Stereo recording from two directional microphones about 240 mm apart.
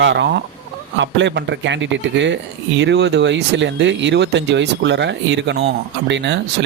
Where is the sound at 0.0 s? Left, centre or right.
Right.